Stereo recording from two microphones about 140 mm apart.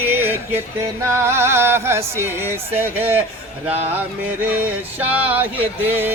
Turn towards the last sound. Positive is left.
turn(degrees=-15)  # may be behind; listen again after turning